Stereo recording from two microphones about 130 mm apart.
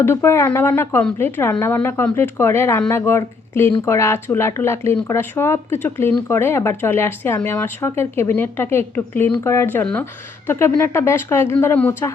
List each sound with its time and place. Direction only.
0.0 s a woman's voice: 20° left (ahead or behind)